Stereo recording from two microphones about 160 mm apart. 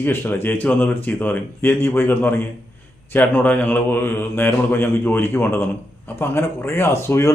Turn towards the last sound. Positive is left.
turn(degrees=15)  # may be behind; listen again after turning